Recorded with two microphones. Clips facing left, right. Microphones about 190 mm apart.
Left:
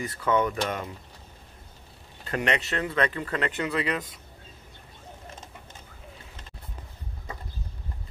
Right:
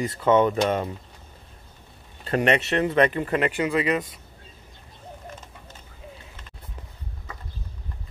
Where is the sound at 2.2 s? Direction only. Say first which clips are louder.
Right 6 dB; 25° right (ahead or behind); by 4.0 s 5° right (ahead or behind).